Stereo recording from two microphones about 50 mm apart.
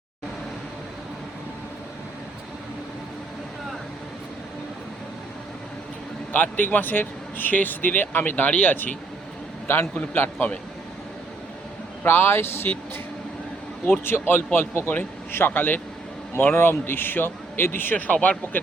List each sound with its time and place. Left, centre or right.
6.3 s speech: left
9.7 s a man's voice: left
12.0 s a man's voice: left
14.0 s a man's voice: left